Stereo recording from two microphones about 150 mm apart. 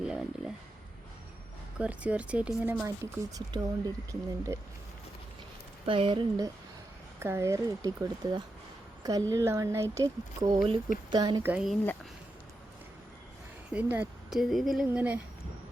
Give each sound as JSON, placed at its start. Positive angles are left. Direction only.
{"t": 0.0, "sound": "a sound", "side_deg": -5}
{"t": 1.8, "sound": "speech", "side_deg": -10}
{"t": 2.8, "sound": "speech", "side_deg": -20}
{"t": 5.8, "sound": "speech", "side_deg": -35}
{"t": 7.2, "sound": "speech", "side_deg": -15}
{"t": 11.4, "sound": "speech", "side_deg": -5}
{"t": 13.7, "sound": "speech", "side_deg": -10}
{"t": 14.3, "sound": "speech", "side_deg": 0}